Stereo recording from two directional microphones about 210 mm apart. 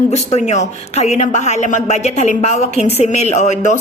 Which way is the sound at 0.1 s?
30° left (ahead or behind).